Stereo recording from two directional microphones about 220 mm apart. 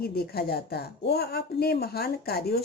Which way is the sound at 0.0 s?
45° left (ahead or behind).